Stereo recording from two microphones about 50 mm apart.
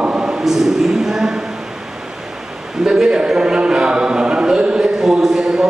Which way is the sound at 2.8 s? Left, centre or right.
Centre.